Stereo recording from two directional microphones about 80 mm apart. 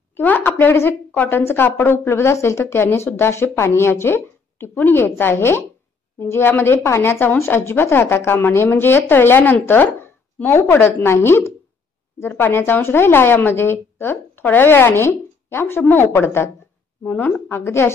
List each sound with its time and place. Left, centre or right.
0.1 s a woman's voice: left